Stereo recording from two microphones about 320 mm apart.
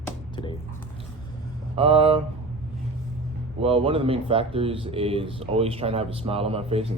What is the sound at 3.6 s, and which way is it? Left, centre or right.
Speech, centre.